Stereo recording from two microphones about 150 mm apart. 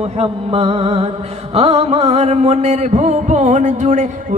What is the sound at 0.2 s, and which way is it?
Mantra, 40° right (ahead or behind).